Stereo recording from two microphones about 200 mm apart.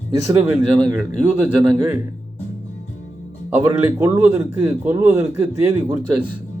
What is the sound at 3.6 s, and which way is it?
Speech, 15° right (ahead or behind).